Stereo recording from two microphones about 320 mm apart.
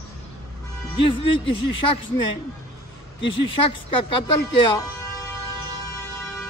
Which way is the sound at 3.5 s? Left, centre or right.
Centre.